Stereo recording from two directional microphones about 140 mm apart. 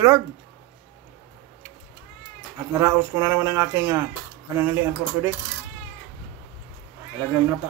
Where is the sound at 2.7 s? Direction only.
20° right (ahead or behind).